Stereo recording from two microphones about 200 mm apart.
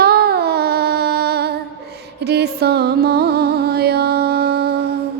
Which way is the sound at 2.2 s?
55° right (ahead or behind).